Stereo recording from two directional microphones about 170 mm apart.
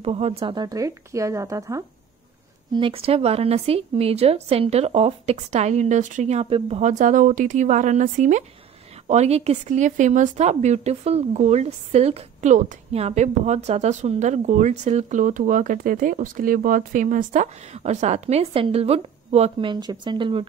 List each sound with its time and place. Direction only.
0.0 s speech: 35° right (ahead or behind); by 1.9 s 20° right (ahead or behind)
2.7 s speech: 30° right (ahead or behind)
19.7 s speech: 25° right (ahead or behind)